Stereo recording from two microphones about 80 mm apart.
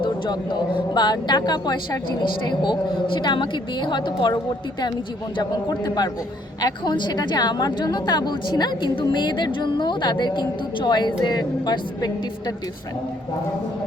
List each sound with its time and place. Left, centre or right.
0.0 s a woman's voice: left
5.4 s a woman's voice: left
6.9 s a woman's voice: left